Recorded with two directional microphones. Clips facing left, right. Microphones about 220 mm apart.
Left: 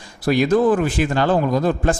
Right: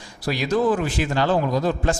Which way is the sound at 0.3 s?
50° left (ahead or behind).